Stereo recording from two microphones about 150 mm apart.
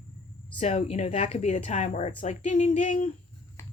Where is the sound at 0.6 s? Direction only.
45° left (ahead or behind).